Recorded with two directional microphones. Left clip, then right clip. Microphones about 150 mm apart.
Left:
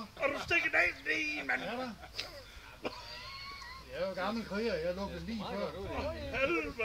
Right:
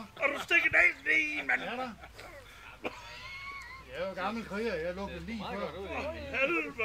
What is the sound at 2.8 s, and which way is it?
Speech, 10° left (ahead or behind).